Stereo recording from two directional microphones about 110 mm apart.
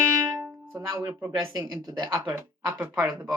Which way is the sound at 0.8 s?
25° right (ahead or behind).